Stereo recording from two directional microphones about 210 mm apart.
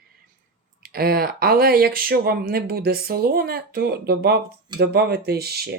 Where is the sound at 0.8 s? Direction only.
45° right (ahead or behind).